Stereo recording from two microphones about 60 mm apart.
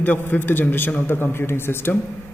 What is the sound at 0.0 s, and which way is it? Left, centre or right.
A man's voice, left.